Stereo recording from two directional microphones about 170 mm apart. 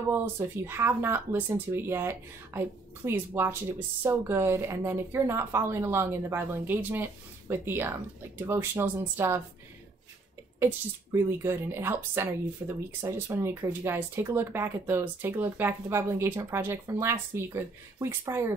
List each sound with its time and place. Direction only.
0.1 s a woman's voice: 15° right (ahead or behind)
10.6 s a woman's voice: 15° right (ahead or behind)